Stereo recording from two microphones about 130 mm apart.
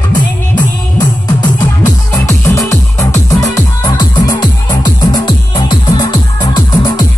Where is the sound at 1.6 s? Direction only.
20° left (ahead or behind).